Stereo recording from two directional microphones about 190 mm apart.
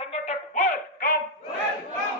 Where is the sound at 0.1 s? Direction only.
35° left (ahead or behind).